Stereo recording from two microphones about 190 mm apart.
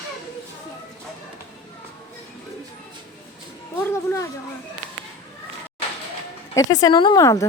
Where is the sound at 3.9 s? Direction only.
15° left (ahead or behind).